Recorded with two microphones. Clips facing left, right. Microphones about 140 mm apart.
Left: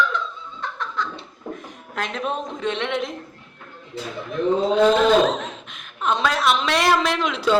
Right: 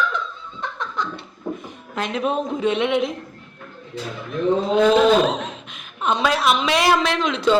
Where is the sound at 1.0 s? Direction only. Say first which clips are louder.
Right 1 dB; 15° right (ahead or behind).